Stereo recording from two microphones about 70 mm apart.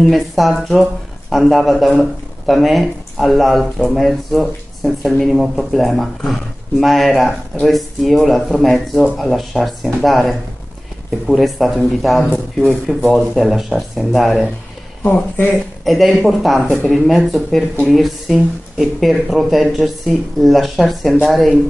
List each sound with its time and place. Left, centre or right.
0.0 s speech: centre
15.0 s speech: left
15.8 s speech: centre